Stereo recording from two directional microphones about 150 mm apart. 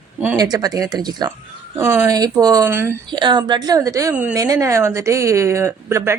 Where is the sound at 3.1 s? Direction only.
30° right (ahead or behind).